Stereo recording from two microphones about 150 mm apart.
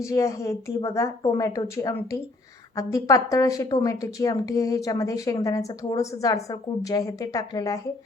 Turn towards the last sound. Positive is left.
turn(degrees=25)  # may be behind; listen again after turning